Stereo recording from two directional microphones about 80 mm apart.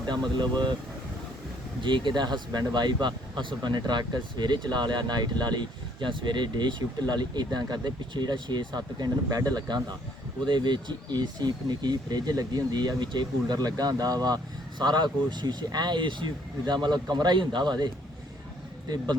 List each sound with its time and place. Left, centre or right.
0.1 s speech: right
1.8 s speech: right
16.6 s speech: right